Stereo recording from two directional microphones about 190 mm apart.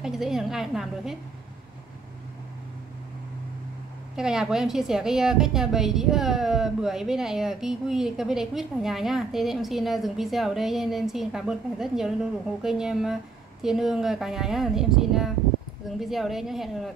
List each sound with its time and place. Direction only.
0.0 s a woman's voice: centre (ahead or behind)
4.2 s a woman's voice: 5° right (ahead or behind)